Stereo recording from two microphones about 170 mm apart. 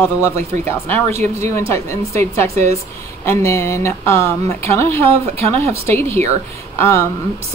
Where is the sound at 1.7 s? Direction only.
15° left (ahead or behind).